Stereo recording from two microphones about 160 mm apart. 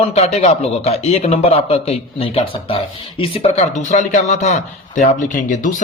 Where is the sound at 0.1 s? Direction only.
40° left (ahead or behind).